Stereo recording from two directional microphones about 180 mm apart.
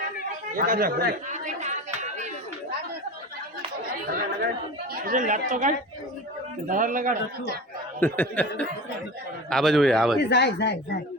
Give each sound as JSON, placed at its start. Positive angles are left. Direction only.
{"t": 0.5, "sound": "speech", "side_deg": -50}
{"t": 1.3, "sound": "chatter", "side_deg": -40}
{"t": 5.0, "sound": "a man's voice", "side_deg": -45}
{"t": 8.0, "sound": "a sound", "side_deg": 10}
{"t": 9.5, "sound": "a man's voice", "side_deg": 0}
{"t": 10.2, "sound": "speech", "side_deg": 70}